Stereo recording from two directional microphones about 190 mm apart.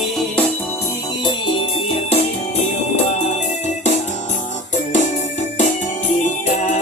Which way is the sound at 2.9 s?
35° left (ahead or behind).